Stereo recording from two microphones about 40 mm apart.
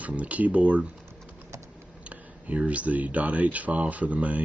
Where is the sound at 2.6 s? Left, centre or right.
Right.